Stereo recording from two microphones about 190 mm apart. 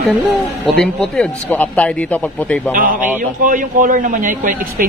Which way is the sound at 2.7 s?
45° right (ahead or behind).